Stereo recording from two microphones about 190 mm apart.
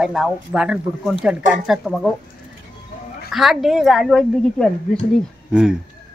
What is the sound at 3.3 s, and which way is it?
Speech, centre (ahead or behind).